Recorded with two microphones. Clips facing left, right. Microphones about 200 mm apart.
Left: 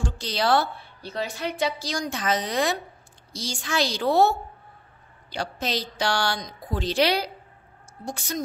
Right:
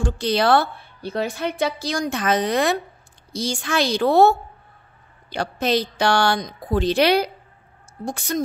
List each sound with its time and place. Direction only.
0.0 s a woman's voice: 55° right (ahead or behind)